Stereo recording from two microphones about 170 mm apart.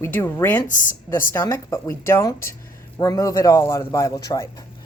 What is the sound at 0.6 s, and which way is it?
Speech, 50° left (ahead or behind).